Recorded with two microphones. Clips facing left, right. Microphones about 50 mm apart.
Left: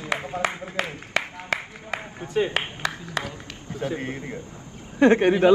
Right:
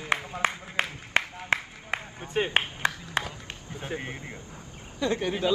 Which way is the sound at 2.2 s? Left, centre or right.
Right.